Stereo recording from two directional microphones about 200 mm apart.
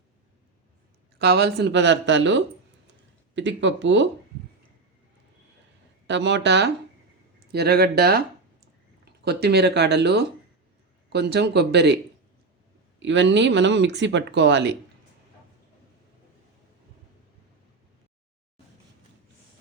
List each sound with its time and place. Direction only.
1.2 s speech: 55° right (ahead or behind)
6.1 s speech: 60° right (ahead or behind)
13.0 s speech: 65° right (ahead or behind)